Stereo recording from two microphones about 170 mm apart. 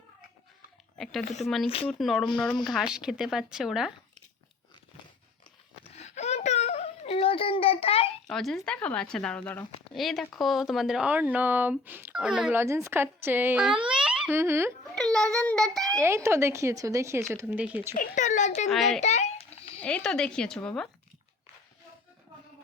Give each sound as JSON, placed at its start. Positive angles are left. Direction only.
{"t": 0.9, "sound": "speech", "side_deg": 0}
{"t": 5.9, "sound": "wail", "side_deg": 40}
{"t": 8.3, "sound": "speech", "side_deg": 0}
{"t": 12.5, "sound": "speech", "side_deg": -15}
{"t": 14.9, "sound": "a child's voice", "side_deg": 0}
{"t": 16.0, "sound": "speech", "side_deg": -15}
{"t": 17.9, "sound": "a child's voice", "side_deg": 50}
{"t": 18.7, "sound": "speech", "side_deg": 0}
{"t": 18.9, "sound": "a sound", "side_deg": 40}
{"t": 19.8, "sound": "speech", "side_deg": 5}